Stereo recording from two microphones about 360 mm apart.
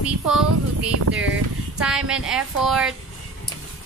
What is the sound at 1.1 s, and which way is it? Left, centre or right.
Speech, right.